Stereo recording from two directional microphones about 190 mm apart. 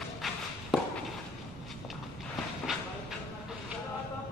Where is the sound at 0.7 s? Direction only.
5° right (ahead or behind).